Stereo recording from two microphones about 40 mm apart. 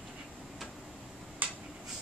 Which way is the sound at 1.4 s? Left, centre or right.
Right.